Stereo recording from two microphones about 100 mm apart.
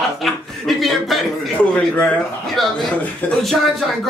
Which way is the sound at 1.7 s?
15° left (ahead or behind).